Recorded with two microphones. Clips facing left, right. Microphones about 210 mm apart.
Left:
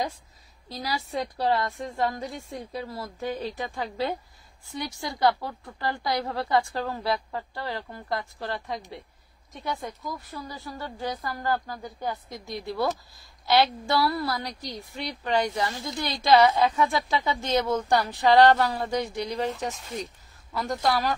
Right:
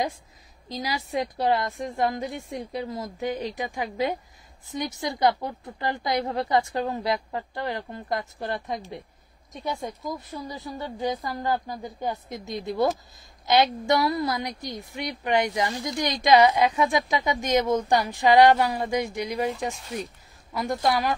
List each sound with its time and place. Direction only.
0.7 s a woman's voice: 15° right (ahead or behind)
20.5 s a woman's voice: 15° right (ahead or behind)